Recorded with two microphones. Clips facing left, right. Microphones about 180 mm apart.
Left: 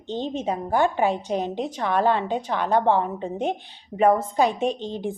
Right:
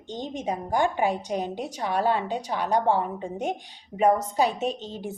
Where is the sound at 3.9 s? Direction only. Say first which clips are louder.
Left 3 dB; 30° left (ahead or behind).